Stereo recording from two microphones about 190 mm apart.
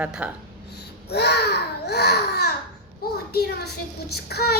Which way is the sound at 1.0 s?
60° left (ahead or behind).